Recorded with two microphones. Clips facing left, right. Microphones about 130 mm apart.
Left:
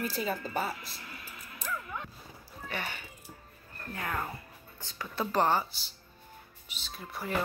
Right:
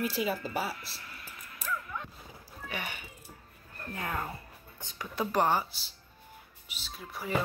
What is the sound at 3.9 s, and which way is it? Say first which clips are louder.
Speech: even; 20° right (ahead or behind).